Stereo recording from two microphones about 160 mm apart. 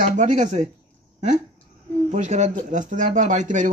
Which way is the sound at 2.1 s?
45° right (ahead or behind).